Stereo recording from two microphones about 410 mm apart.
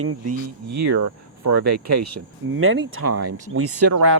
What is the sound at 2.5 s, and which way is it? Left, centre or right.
Speech, right.